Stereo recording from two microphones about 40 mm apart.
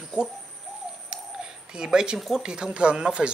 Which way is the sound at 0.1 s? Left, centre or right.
Right.